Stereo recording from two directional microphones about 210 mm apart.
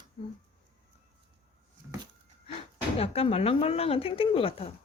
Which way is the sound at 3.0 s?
30° left (ahead or behind).